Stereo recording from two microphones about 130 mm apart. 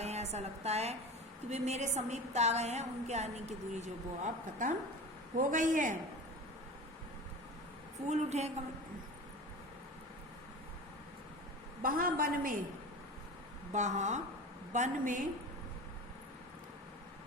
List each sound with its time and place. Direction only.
0.0 s a woman's voice: 55° right (ahead or behind)
5.4 s a woman's voice: 90° right
8.0 s a woman's voice: 60° right (ahead or behind)
11.8 s a woman's voice: 90° right
13.7 s a woman's voice: 70° right (ahead or behind)
14.7 s a woman's voice: 80° right